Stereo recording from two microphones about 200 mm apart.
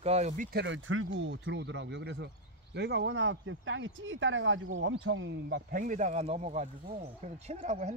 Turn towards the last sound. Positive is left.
turn(degrees=-35)  # may be behind; listen again after turning